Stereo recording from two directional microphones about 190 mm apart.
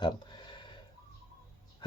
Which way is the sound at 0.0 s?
25° left (ahead or behind).